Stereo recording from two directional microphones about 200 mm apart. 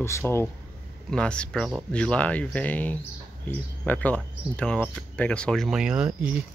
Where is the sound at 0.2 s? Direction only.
10° left (ahead or behind).